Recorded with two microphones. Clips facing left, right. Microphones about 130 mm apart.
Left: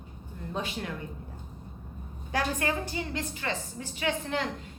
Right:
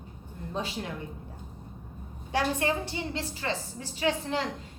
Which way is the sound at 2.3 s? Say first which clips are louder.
Right 2 dB; 25° right (ahead or behind).